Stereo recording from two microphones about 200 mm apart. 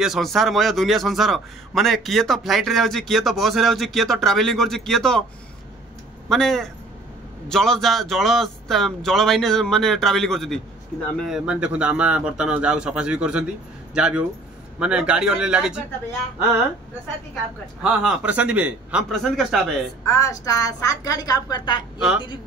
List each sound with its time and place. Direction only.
0.0 s a man's voice: centre (ahead or behind)
6.2 s a man's voice: centre (ahead or behind)
18.0 s a man's voice: 5° right (ahead or behind)
20.1 s a woman's voice: 15° left (ahead or behind)
21.9 s a woman's voice: 5° right (ahead or behind)